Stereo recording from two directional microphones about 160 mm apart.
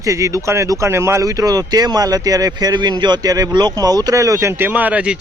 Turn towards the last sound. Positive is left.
turn(degrees=-5)  # may be behind; listen again after turning